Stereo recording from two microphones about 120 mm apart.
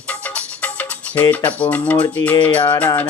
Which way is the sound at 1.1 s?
10° left (ahead or behind).